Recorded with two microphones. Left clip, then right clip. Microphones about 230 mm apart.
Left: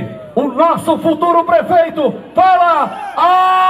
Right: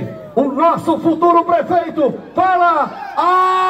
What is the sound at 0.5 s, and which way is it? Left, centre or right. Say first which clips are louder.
A man's voice: left 3 dB; left.